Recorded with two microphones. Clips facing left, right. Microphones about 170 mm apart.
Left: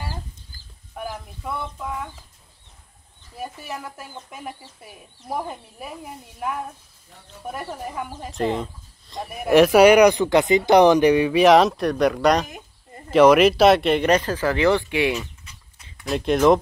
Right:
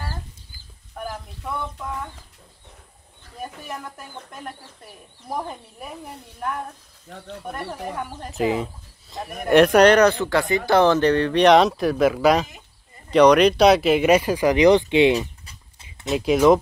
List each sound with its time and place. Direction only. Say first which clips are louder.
0.9 s a sound: even; centre (ahead or behind)
3.6 s speech: left 1 dB; 5° left (ahead or behind)
7.1 s speech: right 11 dB; 90° right
7.5 s speech: even; 5° left (ahead or behind)
12.4 s a sound: left 8 dB; 55° left (ahead or behind)
13.1 s speech: even; 5° left (ahead or behind); by 15.1 s 20° right (ahead or behind)
16.1 s speech: right 1 dB; 5° right (ahead or behind)